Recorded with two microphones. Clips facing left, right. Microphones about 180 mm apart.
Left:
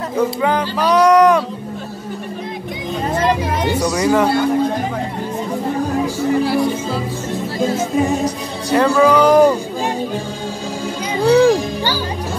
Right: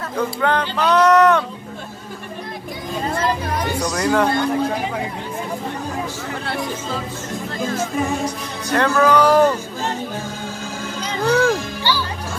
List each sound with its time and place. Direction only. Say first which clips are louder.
0.2 s speech: left 3 dB; 5° left (ahead or behind)
3.1 s speech: left 5 dB; 25° left (ahead or behind)
3.8 s speech: left 3 dB; 5° left (ahead or behind)
6.4 s speech: left 8 dB; 5° left (ahead or behind)
8.6 s speech: left 4 dB; 10° left (ahead or behind)
11.1 s speech: left 6 dB; 10° left (ahead or behind)
11.8 s music: left 1 dB; 45° left (ahead or behind)